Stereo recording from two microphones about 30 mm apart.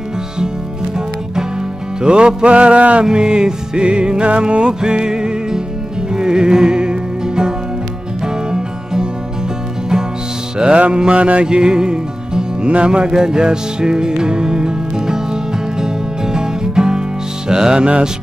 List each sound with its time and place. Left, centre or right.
2.0 s music: right
3.1 s music: right
10.9 s music: right
11.4 s music: right